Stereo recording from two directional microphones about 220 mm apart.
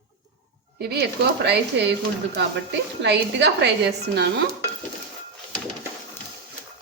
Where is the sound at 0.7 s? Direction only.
50° right (ahead or behind).